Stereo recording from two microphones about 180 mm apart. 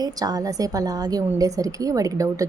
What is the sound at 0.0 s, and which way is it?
A woman's voice, 20° right (ahead or behind).